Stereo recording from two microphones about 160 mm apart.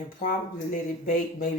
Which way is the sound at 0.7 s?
60° left (ahead or behind).